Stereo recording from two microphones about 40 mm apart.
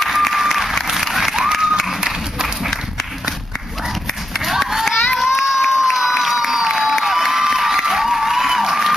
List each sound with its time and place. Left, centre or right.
0.0 s applause: centre
1.3 s a sound: centre
2.0 s run: centre
4.5 s run: centre
5.2 s crowd: centre
7.1 s cheering: centre